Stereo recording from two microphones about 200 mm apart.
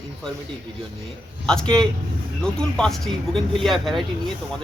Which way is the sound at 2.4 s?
5° left (ahead or behind).